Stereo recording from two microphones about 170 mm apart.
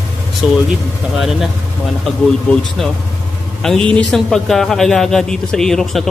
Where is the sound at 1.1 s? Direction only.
Centre (ahead or behind).